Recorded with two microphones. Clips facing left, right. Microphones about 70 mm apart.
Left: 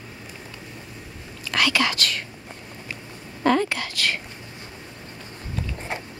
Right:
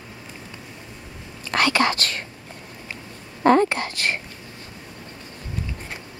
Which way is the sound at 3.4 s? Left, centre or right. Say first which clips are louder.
Right 4 dB; right.